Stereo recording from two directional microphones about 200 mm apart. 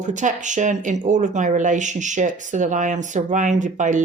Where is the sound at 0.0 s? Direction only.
40° right (ahead or behind).